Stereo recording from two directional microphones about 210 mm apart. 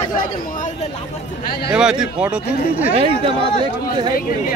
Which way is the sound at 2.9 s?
25° right (ahead or behind).